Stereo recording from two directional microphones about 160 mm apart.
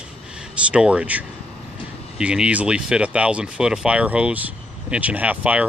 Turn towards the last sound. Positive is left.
turn(degrees=-10)  # may be behind; listen again after turning